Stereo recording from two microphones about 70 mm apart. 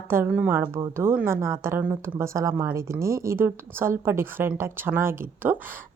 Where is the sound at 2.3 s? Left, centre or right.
Right.